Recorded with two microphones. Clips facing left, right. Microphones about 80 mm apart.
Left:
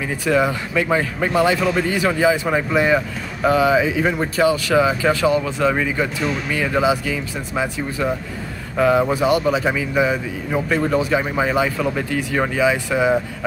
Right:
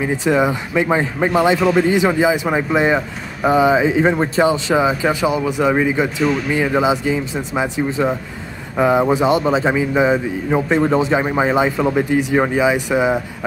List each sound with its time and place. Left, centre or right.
0.0 s speech: right